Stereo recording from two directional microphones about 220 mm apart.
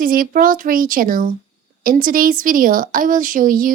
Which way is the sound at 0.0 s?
40° right (ahead or behind).